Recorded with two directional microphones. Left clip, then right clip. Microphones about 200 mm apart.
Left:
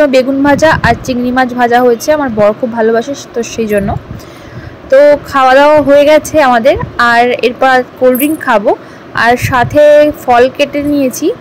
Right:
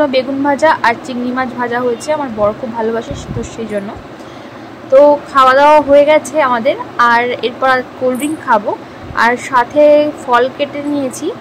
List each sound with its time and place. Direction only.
0.0 s a woman's voice: 20° left (ahead or behind)
4.9 s a woman's voice: 25° left (ahead or behind)